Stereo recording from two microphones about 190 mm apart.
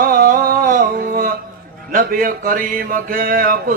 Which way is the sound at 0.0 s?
50° right (ahead or behind).